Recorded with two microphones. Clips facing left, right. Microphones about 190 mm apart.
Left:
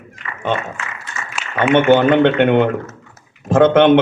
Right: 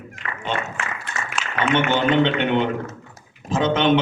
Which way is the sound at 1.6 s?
55° left (ahead or behind).